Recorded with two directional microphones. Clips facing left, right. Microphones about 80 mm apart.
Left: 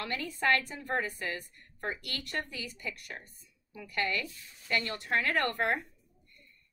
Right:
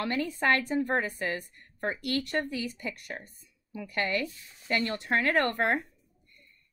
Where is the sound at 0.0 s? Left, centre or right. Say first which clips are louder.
Right 4 dB; right.